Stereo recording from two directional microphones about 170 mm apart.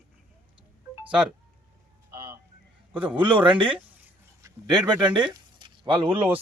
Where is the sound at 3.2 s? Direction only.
30° right (ahead or behind).